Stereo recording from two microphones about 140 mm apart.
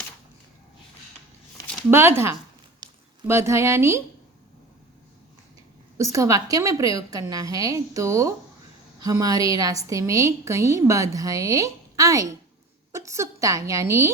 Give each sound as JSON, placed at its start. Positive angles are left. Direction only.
{"t": 1.9, "sound": "speech", "side_deg": -15}
{"t": 6.0, "sound": "a woman's voice", "side_deg": -20}